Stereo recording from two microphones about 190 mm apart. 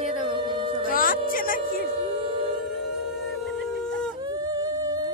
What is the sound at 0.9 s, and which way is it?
Music, 50° left (ahead or behind).